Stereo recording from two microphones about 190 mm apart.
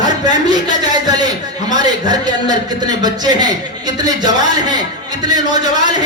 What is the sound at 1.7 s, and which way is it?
A man's voice, 20° right (ahead or behind).